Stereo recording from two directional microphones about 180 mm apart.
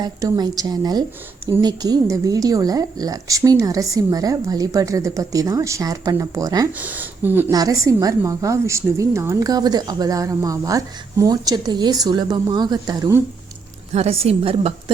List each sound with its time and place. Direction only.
0.0 s a woman's voice: 20° right (ahead or behind)
6.7 s a woman's voice: 10° right (ahead or behind)
13.9 s a woman's voice: 35° right (ahead or behind)